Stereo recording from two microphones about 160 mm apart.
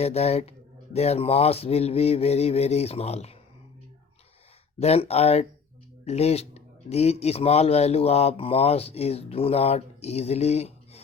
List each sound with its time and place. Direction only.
0.0 s speech: 40° left (ahead or behind)
4.8 s speech: 40° left (ahead or behind)